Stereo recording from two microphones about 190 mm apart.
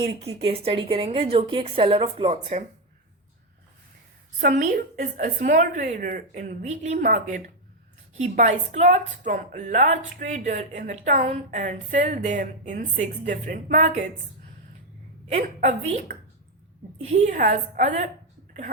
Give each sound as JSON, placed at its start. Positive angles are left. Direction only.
{"t": 0.2, "sound": "a woman's voice", "side_deg": -30}
{"t": 4.4, "sound": "a woman's voice", "side_deg": -40}
{"t": 15.3, "sound": "a woman's voice", "side_deg": -40}